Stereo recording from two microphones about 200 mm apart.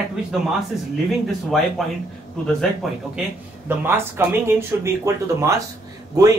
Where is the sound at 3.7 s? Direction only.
10° right (ahead or behind).